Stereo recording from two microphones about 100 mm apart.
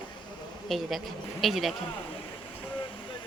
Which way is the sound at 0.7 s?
Centre (ahead or behind).